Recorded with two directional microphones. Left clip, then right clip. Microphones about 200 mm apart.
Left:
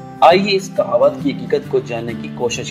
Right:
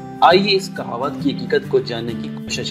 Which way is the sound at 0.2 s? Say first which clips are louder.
Left 2 dB; 20° right (ahead or behind).